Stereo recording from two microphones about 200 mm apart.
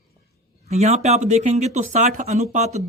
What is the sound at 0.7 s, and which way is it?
Speech, 35° right (ahead or behind).